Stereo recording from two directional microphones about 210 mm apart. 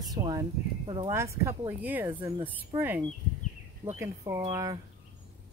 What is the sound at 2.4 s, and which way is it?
Speech, 10° right (ahead or behind).